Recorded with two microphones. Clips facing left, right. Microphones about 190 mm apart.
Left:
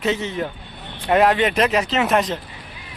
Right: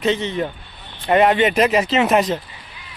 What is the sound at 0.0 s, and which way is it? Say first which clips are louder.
Speech: right 2 dB; 5° left (ahead or behind).